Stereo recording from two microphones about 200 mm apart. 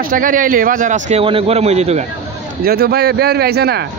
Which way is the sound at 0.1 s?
40° right (ahead or behind).